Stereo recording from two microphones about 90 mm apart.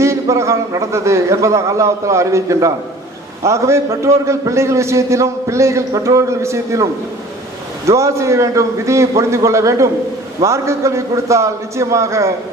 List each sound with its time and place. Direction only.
0.0 s a man's voice: 30° right (ahead or behind)
7.9 s a man's voice: 35° right (ahead or behind)